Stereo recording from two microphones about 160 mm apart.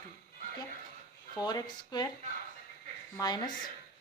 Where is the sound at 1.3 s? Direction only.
25° left (ahead or behind).